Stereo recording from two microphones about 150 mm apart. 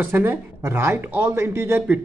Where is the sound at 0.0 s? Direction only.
15° right (ahead or behind).